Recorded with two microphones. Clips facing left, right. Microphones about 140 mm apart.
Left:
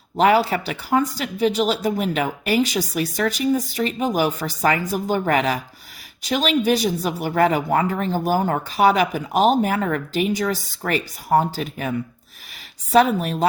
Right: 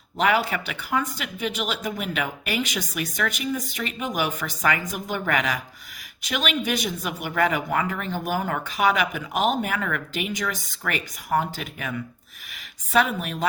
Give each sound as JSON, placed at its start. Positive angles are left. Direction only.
{"t": 0.2, "sound": "speech", "side_deg": 35}